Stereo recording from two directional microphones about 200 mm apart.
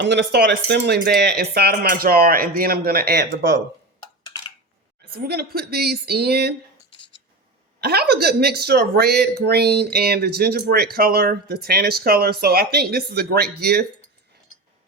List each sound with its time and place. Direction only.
0.0 s speech: 60° right (ahead or behind)
5.1 s speech: 50° right (ahead or behind)
7.8 s speech: 50° right (ahead or behind)